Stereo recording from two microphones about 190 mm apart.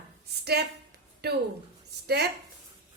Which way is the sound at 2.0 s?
55° right (ahead or behind).